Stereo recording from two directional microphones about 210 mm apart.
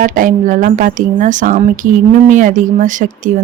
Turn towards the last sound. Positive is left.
turn(degrees=-40)  # may be behind; listen again after turning